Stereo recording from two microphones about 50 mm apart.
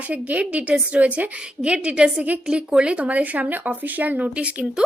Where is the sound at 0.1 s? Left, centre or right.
Right.